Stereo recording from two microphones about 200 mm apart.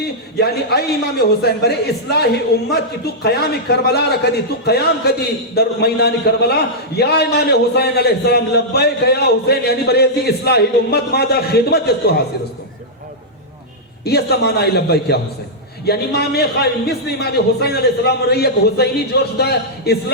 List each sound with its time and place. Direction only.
0.3 s a man's voice: 55° left (ahead or behind)
14.0 s a man's voice: 55° left (ahead or behind)